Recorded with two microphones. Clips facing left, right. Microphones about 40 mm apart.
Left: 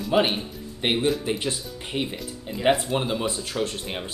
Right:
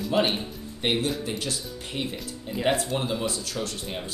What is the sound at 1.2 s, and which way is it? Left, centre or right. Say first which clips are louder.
Speech: left 4 dB; left.